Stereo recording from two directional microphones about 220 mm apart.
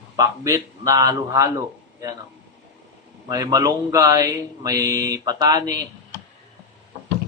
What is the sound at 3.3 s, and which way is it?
Speech, 15° right (ahead or behind).